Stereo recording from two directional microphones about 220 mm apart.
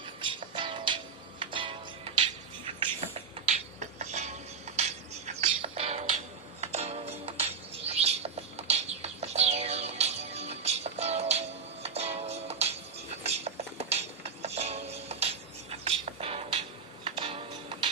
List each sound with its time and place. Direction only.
0.2 s music: 20° right (ahead or behind)
2.6 s a sound: 25° right (ahead or behind)
4.8 s music: 30° right (ahead or behind)